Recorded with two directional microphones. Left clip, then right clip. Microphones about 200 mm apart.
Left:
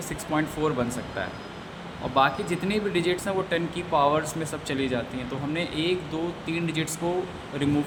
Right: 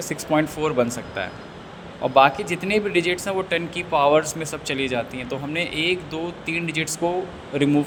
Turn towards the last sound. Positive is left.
turn(degrees=-25)  # may be behind; listen again after turning